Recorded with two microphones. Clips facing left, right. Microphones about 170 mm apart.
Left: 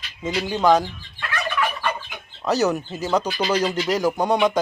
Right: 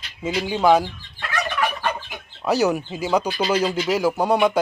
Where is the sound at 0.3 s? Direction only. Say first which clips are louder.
Right 1 dB; 5° right (ahead or behind).